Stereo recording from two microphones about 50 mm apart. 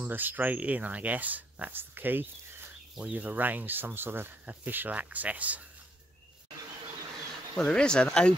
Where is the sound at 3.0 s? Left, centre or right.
Right.